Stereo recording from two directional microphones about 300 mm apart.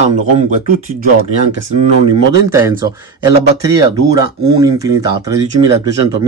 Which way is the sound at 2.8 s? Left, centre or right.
Centre.